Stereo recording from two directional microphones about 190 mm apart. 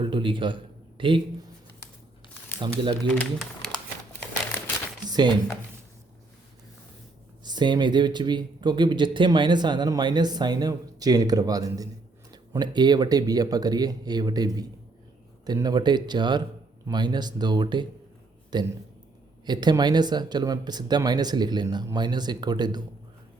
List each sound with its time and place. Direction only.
0.0 s a man's voice: 25° right (ahead or behind)
2.6 s speech: 25° right (ahead or behind)
3.2 s speech: 5° left (ahead or behind)
5.0 s a sound: 20° right (ahead or behind)
7.4 s speech: 25° right (ahead or behind)